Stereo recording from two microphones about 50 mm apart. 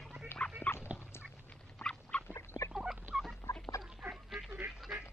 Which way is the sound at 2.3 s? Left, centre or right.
Left.